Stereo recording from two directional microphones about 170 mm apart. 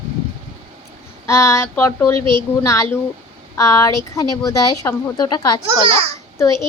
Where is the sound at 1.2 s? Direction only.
15° left (ahead or behind).